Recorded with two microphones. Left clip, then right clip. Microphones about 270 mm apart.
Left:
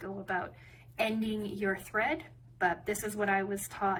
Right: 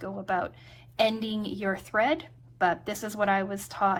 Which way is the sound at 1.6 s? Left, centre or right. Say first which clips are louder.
Right 5 dB; centre.